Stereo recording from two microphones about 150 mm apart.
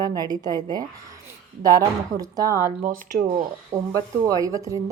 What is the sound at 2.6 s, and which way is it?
Speech, 65° right (ahead or behind).